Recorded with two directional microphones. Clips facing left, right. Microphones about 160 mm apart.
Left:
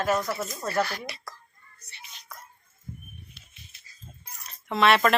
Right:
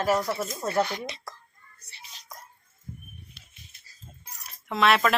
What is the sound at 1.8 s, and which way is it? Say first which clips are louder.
Whispering: left 1 dB; 35° right (ahead or behind).